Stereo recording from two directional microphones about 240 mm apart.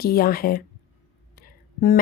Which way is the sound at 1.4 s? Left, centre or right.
Left.